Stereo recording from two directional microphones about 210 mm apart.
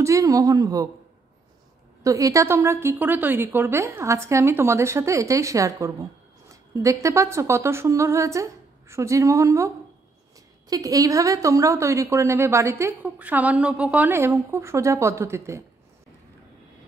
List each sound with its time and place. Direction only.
0.0 s a woman's voice: 15° right (ahead or behind)
2.0 s a woman's voice: 15° right (ahead or behind)
10.7 s a woman's voice: 15° right (ahead or behind)